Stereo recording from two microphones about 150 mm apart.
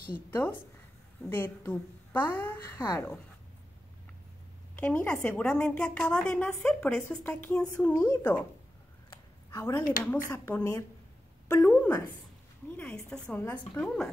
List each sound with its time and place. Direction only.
0.3 s a woman's voice: 15° left (ahead or behind)
4.7 s a woman's voice: 5° left (ahead or behind)
9.5 s a woman's voice: 20° left (ahead or behind)